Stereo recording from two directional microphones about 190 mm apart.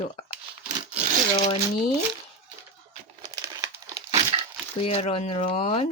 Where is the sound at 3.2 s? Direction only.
20° right (ahead or behind).